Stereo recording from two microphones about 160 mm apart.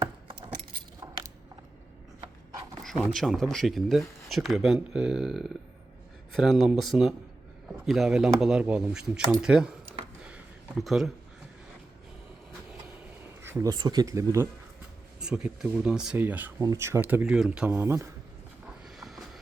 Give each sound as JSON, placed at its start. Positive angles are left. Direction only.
{"t": 0.3, "sound": "keys jangling", "side_deg": -30}
{"t": 1.0, "sound": "a sound", "side_deg": -20}
{"t": 2.8, "sound": "speech", "side_deg": 0}
{"t": 10.2, "sound": "a sound", "side_deg": -5}
{"t": 13.4, "sound": "speech", "side_deg": -15}
{"t": 15.2, "sound": "speech", "side_deg": -5}
{"t": 18.9, "sound": "train", "side_deg": 0}